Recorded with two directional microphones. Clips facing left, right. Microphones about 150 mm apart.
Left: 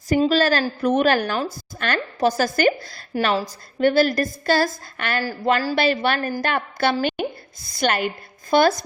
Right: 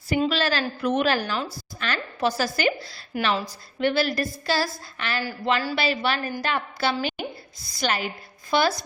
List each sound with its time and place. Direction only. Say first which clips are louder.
0.1 s a woman's voice: left 5 dB; 40° left (ahead or behind)